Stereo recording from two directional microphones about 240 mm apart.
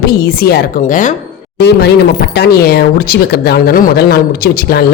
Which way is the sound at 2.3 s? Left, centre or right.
Left.